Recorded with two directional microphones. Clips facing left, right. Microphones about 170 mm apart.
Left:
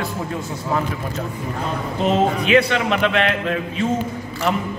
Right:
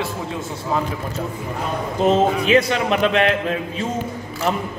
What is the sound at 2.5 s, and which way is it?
Speech, 35° right (ahead or behind).